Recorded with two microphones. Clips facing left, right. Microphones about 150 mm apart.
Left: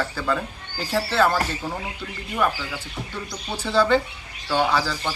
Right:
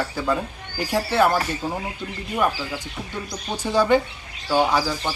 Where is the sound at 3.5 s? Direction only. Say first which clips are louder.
Right 1 dB; 15° right (ahead or behind).